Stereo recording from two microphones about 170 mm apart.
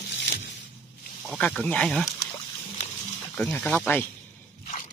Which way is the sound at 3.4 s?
10° left (ahead or behind).